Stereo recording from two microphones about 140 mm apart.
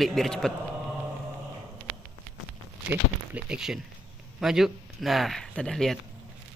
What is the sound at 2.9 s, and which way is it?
Speech, 10° right (ahead or behind).